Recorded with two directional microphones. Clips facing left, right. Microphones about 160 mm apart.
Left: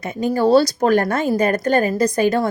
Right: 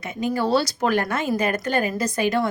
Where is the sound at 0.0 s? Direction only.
40° left (ahead or behind).